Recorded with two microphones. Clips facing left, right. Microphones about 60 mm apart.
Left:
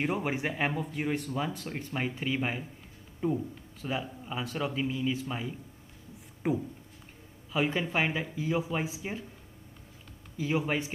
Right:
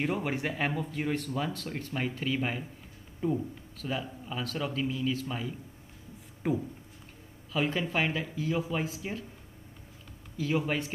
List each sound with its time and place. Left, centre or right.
0.0 s speech: centre
10.3 s speech: centre